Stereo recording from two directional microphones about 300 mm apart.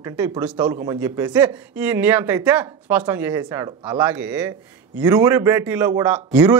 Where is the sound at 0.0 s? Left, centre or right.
Centre.